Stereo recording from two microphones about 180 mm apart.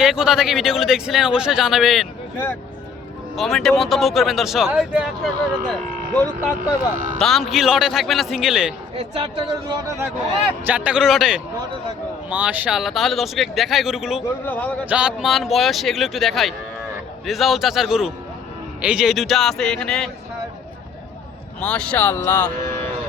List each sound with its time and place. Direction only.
0.0 s speech: centre (ahead or behind)
3.3 s speech: centre (ahead or behind)
6.1 s speech: 10° left (ahead or behind)
9.0 s speech: 30° right (ahead or behind)
10.6 s speech: 10° right (ahead or behind)
14.4 s speech: 10° left (ahead or behind)
14.8 s speech: 5° right (ahead or behind)
21.6 s speech: 5° left (ahead or behind)